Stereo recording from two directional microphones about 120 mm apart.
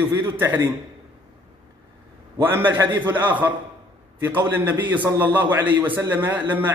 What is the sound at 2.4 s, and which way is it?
A man's voice, 15° right (ahead or behind).